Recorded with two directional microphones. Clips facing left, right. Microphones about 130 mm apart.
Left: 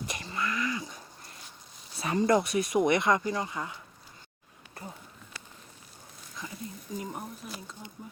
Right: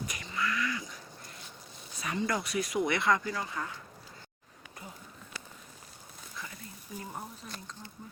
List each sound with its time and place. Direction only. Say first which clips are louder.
0.1 s a sound: left 2 dB; 30° left (ahead or behind)
2.0 s speech: left 8 dB; 30° left (ahead or behind)
7.0 s speech: left 4 dB; 15° left (ahead or behind)